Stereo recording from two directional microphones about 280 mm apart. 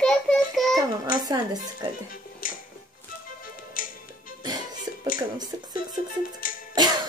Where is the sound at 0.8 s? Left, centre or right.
Centre.